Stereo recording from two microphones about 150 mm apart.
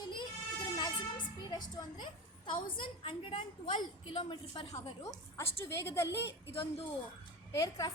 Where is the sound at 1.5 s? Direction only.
30° left (ahead or behind).